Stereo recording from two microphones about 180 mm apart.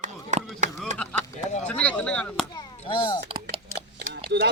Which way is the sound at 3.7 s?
60° right (ahead or behind).